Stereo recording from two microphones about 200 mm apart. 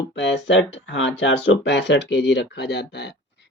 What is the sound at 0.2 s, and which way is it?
Speech, 65° left (ahead or behind).